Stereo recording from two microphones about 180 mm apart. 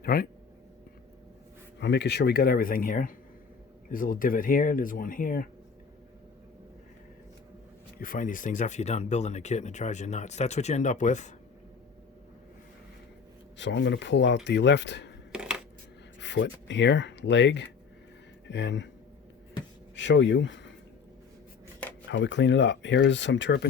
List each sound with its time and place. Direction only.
0.0 s speech: 55° left (ahead or behind)
1.8 s speech: 75° left (ahead or behind); by 5.5 s 50° left (ahead or behind)
7.9 s speech: 50° left (ahead or behind)
13.6 s speech: 85° left
15.3 s coin: 5° right (ahead or behind)
16.2 s speech: 85° left
20.0 s speech: 90° left
22.1 s speech: 85° left